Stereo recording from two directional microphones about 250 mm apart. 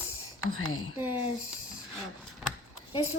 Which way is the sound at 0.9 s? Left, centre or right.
Centre.